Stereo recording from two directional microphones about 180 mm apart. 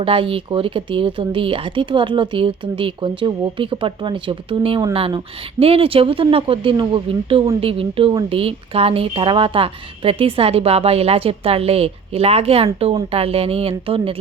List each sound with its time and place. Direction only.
0.0 s a woman's voice: 30° right (ahead or behind)